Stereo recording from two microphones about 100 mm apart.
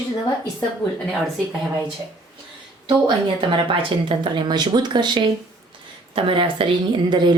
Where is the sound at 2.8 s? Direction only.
55° right (ahead or behind).